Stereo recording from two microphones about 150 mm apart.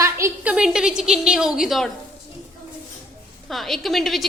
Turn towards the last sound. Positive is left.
turn(degrees=0)  # may be behind; listen again after turning